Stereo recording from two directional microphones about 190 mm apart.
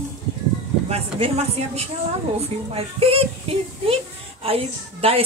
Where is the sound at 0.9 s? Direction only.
35° right (ahead or behind).